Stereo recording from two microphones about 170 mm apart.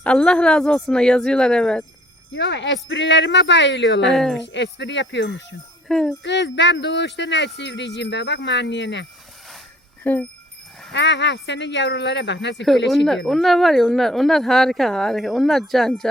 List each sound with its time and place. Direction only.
0.0 s speech: 5° left (ahead or behind)
2.3 s speech: 90° left
4.0 s speech: centre (ahead or behind)
4.4 s speech: 90° left
5.9 s speech: centre (ahead or behind)
6.2 s speech: 90° left
10.0 s speech: 10° left (ahead or behind)
10.9 s speech: 90° left
13.1 s speech: centre (ahead or behind)